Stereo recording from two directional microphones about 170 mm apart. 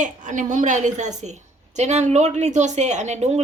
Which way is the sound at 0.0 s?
50° right (ahead or behind).